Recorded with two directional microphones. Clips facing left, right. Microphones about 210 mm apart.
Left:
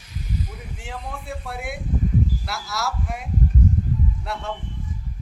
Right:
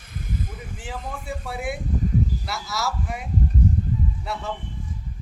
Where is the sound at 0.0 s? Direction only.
50° right (ahead or behind).